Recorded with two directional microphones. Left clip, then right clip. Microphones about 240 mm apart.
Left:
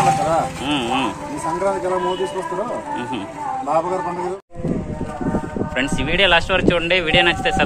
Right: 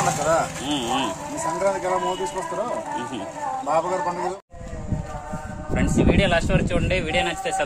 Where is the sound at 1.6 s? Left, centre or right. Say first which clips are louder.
Left 2 dB; right.